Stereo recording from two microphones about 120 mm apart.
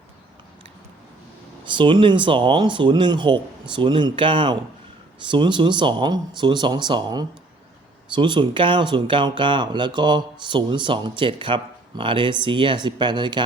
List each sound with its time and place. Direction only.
1.6 s speech: 40° right (ahead or behind)